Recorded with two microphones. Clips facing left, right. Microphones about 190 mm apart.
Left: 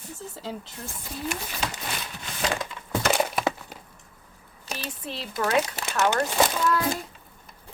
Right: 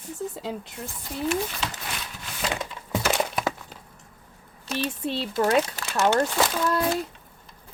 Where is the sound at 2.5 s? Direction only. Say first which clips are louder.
Even; 15° right (ahead or behind).